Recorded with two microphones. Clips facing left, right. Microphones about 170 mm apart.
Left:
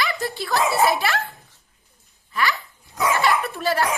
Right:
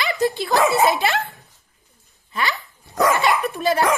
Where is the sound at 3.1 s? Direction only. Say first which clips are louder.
Right 1 dB; 20° right (ahead or behind).